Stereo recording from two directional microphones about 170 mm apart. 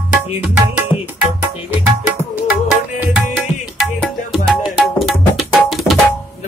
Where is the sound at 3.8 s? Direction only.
Centre (ahead or behind).